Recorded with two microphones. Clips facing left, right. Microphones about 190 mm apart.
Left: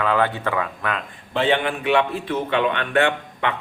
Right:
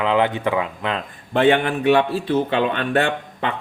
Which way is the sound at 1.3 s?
50° right (ahead or behind).